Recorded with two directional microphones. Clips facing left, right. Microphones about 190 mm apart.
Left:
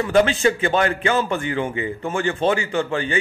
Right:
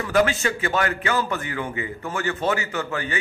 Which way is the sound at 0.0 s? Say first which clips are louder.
Left 4 dB; 25° left (ahead or behind).